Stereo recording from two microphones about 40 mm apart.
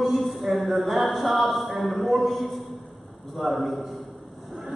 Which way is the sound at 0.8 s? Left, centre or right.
Centre.